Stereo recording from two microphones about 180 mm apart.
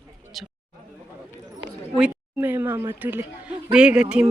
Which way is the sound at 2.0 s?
10° right (ahead or behind).